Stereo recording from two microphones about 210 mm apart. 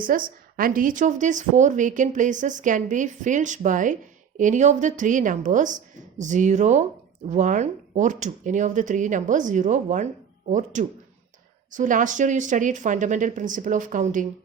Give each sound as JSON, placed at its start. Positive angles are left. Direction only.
{"t": 0.0, "sound": "a woman's voice", "side_deg": -40}